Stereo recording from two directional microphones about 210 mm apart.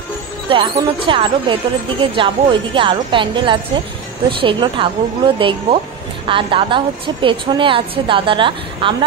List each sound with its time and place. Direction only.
0.5 s speech: 25° right (ahead or behind)